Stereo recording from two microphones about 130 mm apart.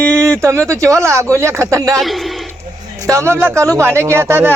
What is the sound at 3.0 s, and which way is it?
Speech, 20° right (ahead or behind).